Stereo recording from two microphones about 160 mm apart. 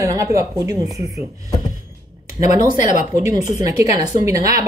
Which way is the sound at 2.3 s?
20° right (ahead or behind).